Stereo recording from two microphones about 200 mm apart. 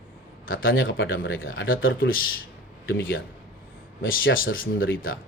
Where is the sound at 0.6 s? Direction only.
80° left.